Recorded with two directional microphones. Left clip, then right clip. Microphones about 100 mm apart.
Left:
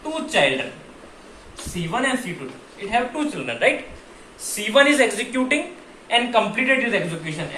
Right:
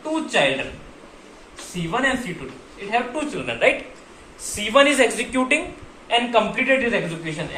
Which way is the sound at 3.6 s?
45° right (ahead or behind).